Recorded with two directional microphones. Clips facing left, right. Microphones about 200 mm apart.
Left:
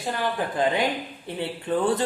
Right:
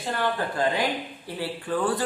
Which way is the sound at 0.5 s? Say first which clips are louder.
Left 4 dB; 20° left (ahead or behind).